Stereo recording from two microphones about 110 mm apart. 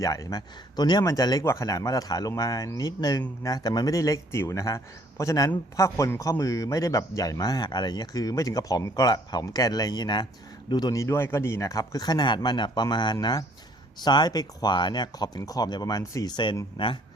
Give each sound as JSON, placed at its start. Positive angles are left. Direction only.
{"t": 0.0, "sound": "speech", "side_deg": 30}